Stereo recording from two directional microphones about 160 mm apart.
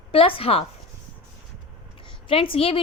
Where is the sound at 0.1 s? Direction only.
35° left (ahead or behind).